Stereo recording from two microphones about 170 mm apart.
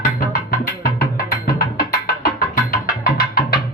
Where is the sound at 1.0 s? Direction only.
65° left (ahead or behind).